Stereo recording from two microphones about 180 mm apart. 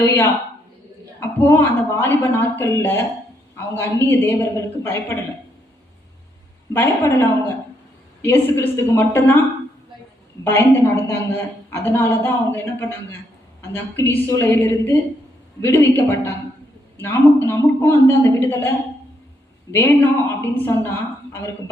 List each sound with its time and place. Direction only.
0.0 s a woman's voice: 10° left (ahead or behind)
6.7 s a woman's voice: 10° left (ahead or behind)
10.4 s a woman's voice: 10° left (ahead or behind)
19.7 s a woman's voice: 10° left (ahead or behind)